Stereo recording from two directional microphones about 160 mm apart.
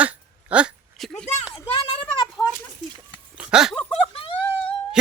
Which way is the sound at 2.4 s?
15° left (ahead or behind).